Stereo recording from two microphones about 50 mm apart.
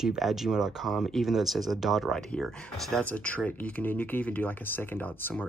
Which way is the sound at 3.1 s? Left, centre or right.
Left.